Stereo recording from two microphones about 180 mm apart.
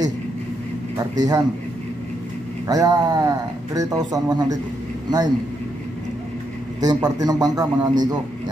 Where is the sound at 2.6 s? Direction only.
20° right (ahead or behind).